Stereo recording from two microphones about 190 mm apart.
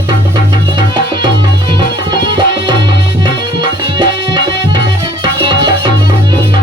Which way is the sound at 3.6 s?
25° right (ahead or behind).